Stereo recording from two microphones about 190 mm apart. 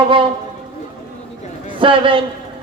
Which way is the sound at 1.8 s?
25° right (ahead or behind).